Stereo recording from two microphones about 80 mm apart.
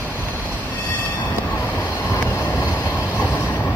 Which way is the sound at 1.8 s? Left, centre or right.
Left.